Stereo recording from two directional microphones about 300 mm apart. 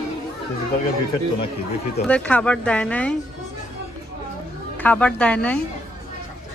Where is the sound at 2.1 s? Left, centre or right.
Centre.